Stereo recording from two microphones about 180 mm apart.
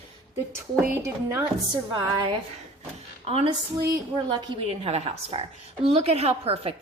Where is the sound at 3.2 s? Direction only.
35° right (ahead or behind).